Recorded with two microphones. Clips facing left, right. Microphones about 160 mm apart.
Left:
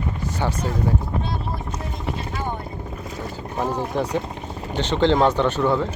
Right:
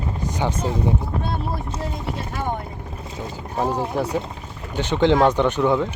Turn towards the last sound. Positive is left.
turn(degrees=-15)  # may be behind; listen again after turning